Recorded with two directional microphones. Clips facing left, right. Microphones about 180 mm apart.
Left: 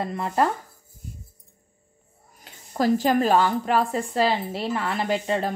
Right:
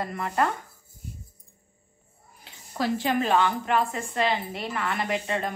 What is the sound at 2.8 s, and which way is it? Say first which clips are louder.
Speech: left 5 dB; 40° left (ahead or behind).